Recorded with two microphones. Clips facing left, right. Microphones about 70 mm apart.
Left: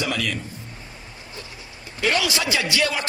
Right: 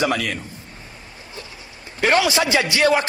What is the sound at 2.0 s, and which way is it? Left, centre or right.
A man's voice, right.